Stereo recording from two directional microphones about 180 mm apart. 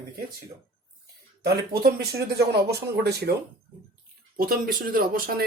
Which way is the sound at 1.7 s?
60° right (ahead or behind).